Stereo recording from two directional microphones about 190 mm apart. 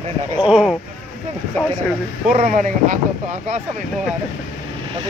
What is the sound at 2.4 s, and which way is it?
Speech, 45° right (ahead or behind).